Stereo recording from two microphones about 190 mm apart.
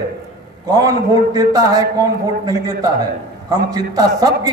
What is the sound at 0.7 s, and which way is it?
A man's voice, 20° right (ahead or behind).